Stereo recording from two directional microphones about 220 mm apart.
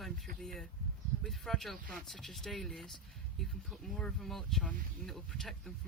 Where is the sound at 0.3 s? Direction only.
Centre (ahead or behind).